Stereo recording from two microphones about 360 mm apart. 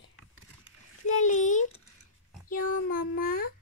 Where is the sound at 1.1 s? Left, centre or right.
Centre.